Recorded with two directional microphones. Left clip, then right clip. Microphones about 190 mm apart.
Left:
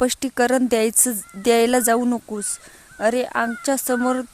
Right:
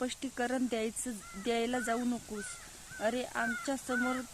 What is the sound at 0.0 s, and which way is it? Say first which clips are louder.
Speech: left 16 dB; 50° left (ahead or behind).